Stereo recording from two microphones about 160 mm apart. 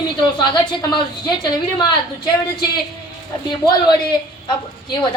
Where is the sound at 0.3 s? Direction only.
30° left (ahead or behind).